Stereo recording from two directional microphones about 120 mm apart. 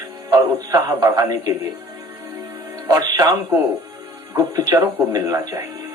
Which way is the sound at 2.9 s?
35° right (ahead or behind).